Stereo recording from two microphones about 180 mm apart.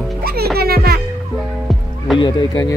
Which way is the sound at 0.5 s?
60° right (ahead or behind).